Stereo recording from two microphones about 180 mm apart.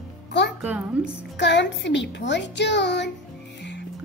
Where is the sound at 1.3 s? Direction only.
75° left (ahead or behind).